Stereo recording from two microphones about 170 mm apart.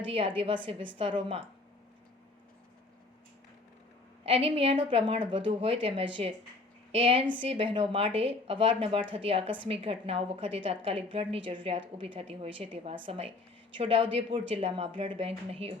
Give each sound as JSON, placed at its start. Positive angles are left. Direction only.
{"t": 0.1, "sound": "a woman's voice", "side_deg": -30}
{"t": 4.3, "sound": "a woman's voice", "side_deg": -35}